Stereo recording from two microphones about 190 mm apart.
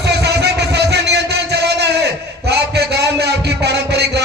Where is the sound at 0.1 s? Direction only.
60° right (ahead or behind).